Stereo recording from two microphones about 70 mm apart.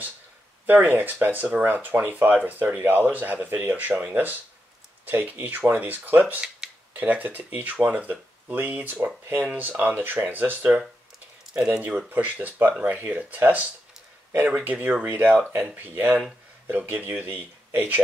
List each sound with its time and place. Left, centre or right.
0.7 s speech: right
12.1 s speech: right